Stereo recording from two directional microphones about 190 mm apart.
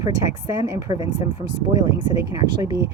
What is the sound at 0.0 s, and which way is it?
Speech, 15° right (ahead or behind).